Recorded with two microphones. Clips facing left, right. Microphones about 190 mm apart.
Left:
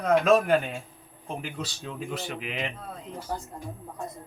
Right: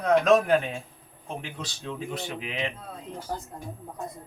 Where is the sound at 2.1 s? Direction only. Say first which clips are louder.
Right 1 dB; centre (ahead or behind).